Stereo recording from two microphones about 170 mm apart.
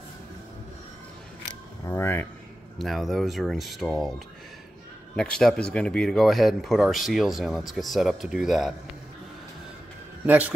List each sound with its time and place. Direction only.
1.9 s speech: 15° left (ahead or behind)
2.8 s speech: centre (ahead or behind)
5.1 s speech: 5° left (ahead or behind)
10.2 s a man's voice: 10° right (ahead or behind)